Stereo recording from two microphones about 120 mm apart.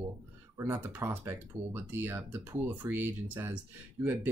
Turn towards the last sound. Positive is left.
turn(degrees=-20)  # may be behind; listen again after turning